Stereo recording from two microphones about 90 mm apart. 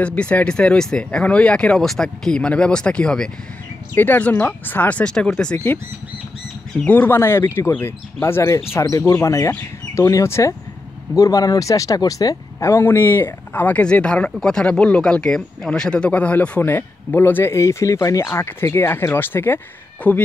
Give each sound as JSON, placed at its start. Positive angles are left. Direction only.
{"t": 0.0, "sound": "speech", "side_deg": 15}
{"t": 3.9, "sound": "speech", "side_deg": 20}
{"t": 6.9, "sound": "speech", "side_deg": 25}